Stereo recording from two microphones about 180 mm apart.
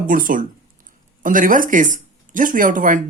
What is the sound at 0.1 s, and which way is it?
Speech, 50° right (ahead or behind).